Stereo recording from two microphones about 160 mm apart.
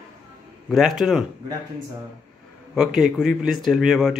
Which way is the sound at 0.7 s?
Centre (ahead or behind).